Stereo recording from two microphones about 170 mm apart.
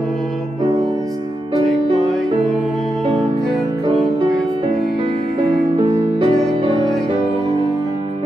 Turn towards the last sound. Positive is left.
turn(degrees=-30)  # may be behind; listen again after turning